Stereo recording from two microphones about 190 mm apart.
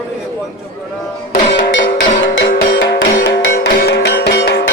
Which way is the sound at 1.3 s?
45° left (ahead or behind).